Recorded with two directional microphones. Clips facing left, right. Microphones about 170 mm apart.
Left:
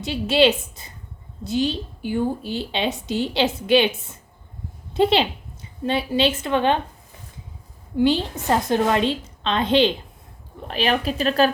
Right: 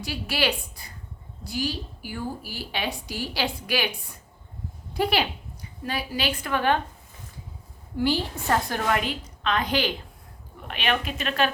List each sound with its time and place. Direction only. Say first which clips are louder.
0.0 s a woman's voice: left 9 dB; 25° left (ahead or behind)
7.9 s a woman's voice: left 6 dB; 20° left (ahead or behind); by 11.5 s 35° left (ahead or behind)